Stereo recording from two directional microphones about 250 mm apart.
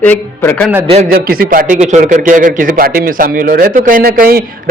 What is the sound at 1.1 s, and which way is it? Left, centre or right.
A man's voice, right.